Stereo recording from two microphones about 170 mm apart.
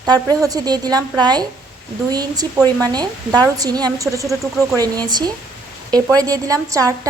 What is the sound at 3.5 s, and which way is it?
A woman's voice, 20° right (ahead or behind).